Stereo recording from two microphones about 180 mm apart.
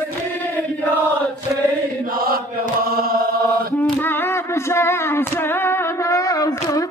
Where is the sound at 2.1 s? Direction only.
55° right (ahead or behind).